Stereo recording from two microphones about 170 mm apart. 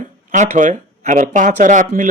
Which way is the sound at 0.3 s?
45° right (ahead or behind).